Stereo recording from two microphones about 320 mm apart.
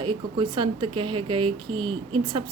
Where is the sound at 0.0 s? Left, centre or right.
Centre.